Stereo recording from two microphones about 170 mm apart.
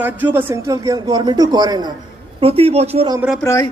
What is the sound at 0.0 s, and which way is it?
A man's voice, 10° right (ahead or behind).